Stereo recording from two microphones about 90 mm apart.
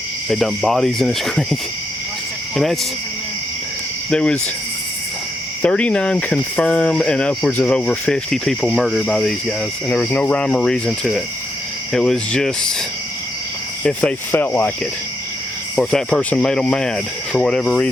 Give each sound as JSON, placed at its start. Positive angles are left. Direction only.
{"t": 0.3, "sound": "speech", "side_deg": 5}
{"t": 4.1, "sound": "speech", "side_deg": 10}
{"t": 5.6, "sound": "speech", "side_deg": 15}
{"t": 9.9, "sound": "speech", "side_deg": 20}
{"t": 14.3, "sound": "speech", "side_deg": 20}
{"t": 15.7, "sound": "speech", "side_deg": 5}